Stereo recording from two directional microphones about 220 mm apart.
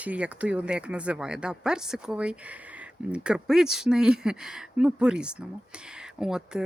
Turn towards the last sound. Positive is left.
turn(degrees=-5)  # may be behind; listen again after turning